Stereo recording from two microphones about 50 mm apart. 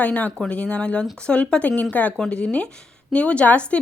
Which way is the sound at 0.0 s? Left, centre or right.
Left.